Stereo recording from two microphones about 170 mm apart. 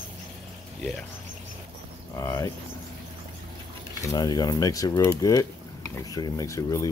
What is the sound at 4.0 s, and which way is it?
Speech, 20° left (ahead or behind).